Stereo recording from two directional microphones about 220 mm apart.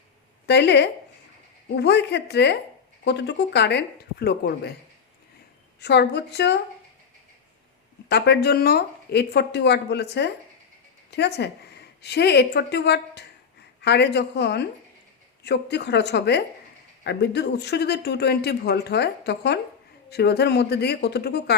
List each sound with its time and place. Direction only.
0.4 s speech: 50° left (ahead or behind)
5.8 s speech: 50° left (ahead or behind)
8.1 s a woman's voice: 50° left (ahead or behind)